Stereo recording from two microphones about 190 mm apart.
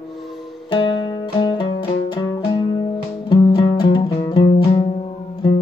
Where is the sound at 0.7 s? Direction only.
25° left (ahead or behind).